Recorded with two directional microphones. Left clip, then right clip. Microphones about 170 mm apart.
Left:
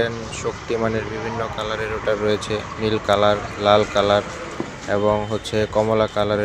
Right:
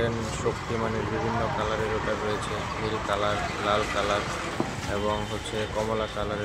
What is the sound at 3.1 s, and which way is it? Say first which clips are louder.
Speech: left 10 dB; 45° left (ahead or behind).